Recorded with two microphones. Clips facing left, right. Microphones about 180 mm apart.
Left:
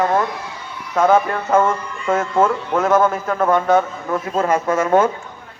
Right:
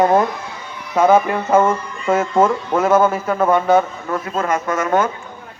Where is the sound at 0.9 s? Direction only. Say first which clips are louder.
Right 2 dB; 5° right (ahead or behind).